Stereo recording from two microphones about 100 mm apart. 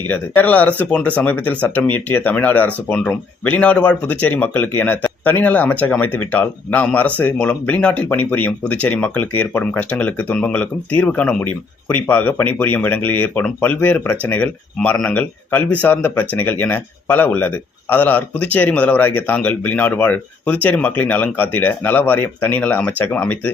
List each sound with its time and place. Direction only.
0.1 s speech: 15° left (ahead or behind)